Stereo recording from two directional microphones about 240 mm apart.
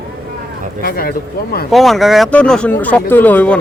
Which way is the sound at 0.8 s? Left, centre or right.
Left.